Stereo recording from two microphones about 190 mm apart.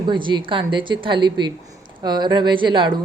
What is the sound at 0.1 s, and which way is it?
Speech, 25° right (ahead or behind).